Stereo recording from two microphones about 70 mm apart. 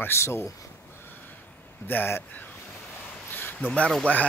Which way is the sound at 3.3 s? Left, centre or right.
Left.